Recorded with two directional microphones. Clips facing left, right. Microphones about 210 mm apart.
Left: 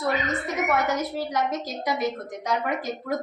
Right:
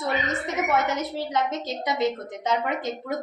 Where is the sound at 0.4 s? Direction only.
25° right (ahead or behind).